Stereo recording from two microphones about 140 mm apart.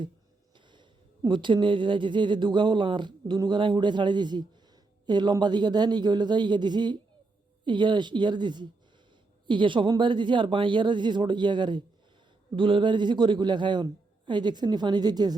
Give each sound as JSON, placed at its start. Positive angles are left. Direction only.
{"t": 0.5, "sound": "a man's voice", "side_deg": -35}